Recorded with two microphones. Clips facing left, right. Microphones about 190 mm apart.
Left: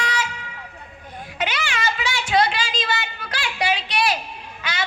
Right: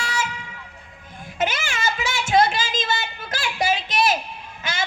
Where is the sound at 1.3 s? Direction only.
45° right (ahead or behind).